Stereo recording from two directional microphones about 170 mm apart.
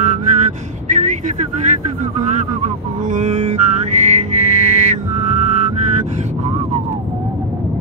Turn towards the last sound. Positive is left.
turn(degrees=-45)  # may be behind; listen again after turning